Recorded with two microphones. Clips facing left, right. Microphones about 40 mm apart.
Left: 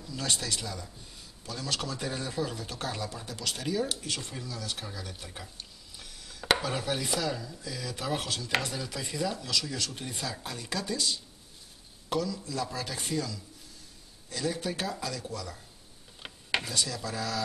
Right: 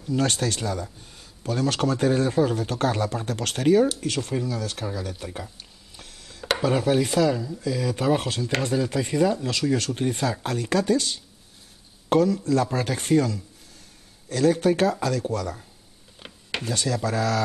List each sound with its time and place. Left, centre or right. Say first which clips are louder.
0.0 s speech: right 10 dB; right
6.7 s speech: right 10 dB; right
7.2 s speech: right 9 dB; centre
7.7 s speech: right 10 dB; right
8.7 s speech: right 12 dB; right
16.2 s a sound: right 1 dB; centre
16.6 s speech: right 8 dB; right